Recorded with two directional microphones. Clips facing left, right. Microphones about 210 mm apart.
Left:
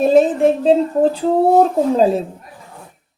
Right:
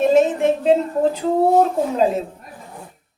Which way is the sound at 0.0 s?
35° left (ahead or behind).